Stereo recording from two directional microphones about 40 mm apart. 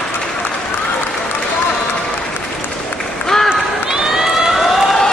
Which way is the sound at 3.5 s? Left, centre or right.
Centre.